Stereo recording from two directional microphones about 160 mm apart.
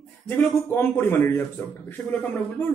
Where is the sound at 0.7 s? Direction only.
15° left (ahead or behind).